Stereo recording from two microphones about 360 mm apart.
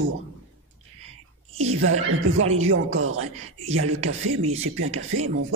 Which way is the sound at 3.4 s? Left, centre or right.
Centre.